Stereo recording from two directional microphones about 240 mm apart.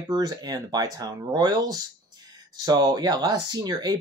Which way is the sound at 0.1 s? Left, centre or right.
Centre.